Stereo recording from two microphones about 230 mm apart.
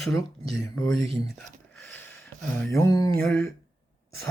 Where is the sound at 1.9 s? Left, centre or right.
Centre.